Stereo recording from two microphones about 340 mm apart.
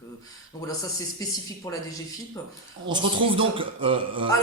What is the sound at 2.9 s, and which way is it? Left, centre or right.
A man's voice, centre.